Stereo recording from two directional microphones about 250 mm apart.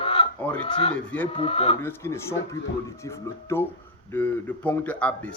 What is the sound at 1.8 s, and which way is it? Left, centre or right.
Speech, centre.